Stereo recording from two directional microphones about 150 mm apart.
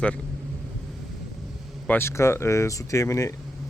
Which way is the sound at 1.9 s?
15° left (ahead or behind).